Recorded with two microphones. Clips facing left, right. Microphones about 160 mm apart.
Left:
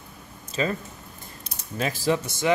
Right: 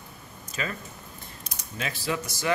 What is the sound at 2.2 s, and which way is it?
Speech, 25° left (ahead or behind).